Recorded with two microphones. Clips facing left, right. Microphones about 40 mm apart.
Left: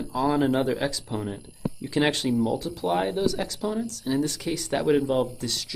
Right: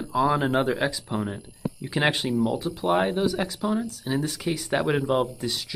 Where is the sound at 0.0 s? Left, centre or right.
Centre.